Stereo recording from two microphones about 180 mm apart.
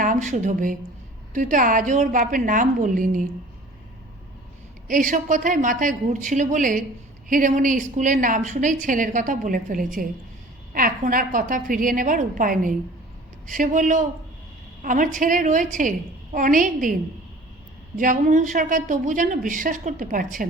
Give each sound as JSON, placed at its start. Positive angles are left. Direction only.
{"t": 0.0, "sound": "a woman's voice", "side_deg": -45}
{"t": 4.9, "sound": "a woman's voice", "side_deg": -45}
{"t": 17.9, "sound": "a woman's voice", "side_deg": -45}